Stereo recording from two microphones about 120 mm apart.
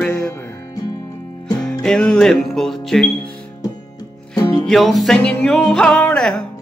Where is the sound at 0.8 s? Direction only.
30° left (ahead or behind).